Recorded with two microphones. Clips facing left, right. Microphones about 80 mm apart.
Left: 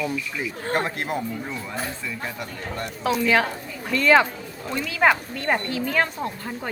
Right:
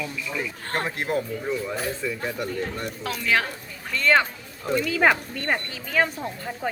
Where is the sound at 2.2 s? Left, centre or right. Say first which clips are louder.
Right 4 dB; centre.